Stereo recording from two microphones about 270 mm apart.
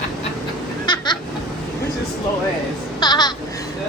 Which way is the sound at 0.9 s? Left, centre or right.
Centre.